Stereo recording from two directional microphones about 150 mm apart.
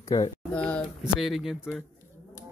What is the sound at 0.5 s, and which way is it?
Speech, 5° left (ahead or behind).